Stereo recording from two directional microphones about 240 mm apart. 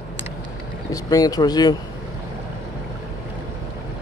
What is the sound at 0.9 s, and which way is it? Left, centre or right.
Speech, centre.